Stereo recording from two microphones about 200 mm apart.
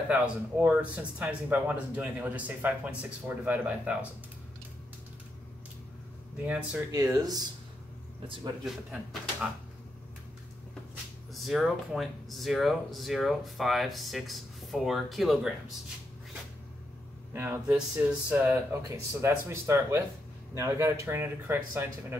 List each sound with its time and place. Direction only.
0.1 s speech: 5° right (ahead or behind)
6.3 s speech: 5° right (ahead or behind)
6.9 s speech: 15° right (ahead or behind)
8.6 s speech: 5° right (ahead or behind)
11.3 s speech: centre (ahead or behind)
17.3 s speech: 10° right (ahead or behind)